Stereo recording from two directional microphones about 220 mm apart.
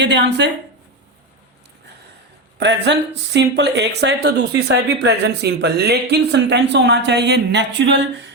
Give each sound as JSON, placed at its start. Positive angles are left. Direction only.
{"t": 0.0, "sound": "speech", "side_deg": -50}
{"t": 2.6, "sound": "speech", "side_deg": -50}